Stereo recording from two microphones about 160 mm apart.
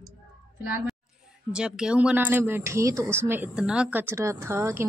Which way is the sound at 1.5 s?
5° right (ahead or behind).